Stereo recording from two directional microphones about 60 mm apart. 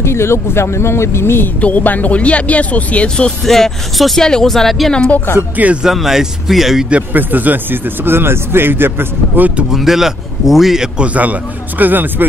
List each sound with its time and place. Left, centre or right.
0.0 s speech: left
1.6 s speech: left
3.4 s speech: centre
5.6 s a man's voice: right
5.9 s speech: centre
6.9 s speech: right
9.7 s speech: centre
11.0 s a man's voice: right